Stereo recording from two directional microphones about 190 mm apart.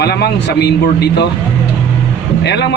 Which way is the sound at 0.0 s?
60° left (ahead or behind).